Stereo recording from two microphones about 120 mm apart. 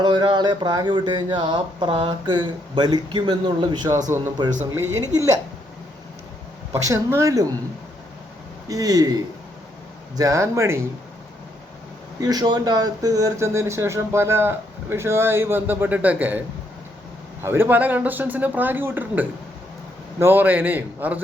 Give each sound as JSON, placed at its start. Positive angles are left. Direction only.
{"t": 0.0, "sound": "speech", "side_deg": -35}
{"t": 6.8, "sound": "speech", "side_deg": -25}
{"t": 8.6, "sound": "speech", "side_deg": -30}
{"t": 10.2, "sound": "speech", "side_deg": -25}
{"t": 12.2, "sound": "speech", "side_deg": -35}
{"t": 17.4, "sound": "speech", "side_deg": -20}